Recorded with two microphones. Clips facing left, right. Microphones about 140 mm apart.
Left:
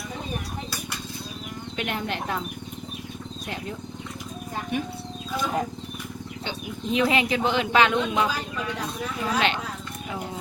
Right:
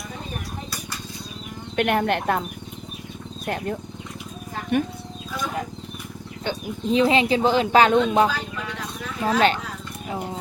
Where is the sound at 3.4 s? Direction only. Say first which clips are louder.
Right 8 dB; 55° right (ahead or behind).